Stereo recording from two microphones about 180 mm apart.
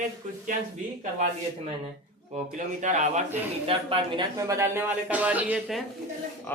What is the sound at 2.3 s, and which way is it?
Speech, 45° right (ahead or behind).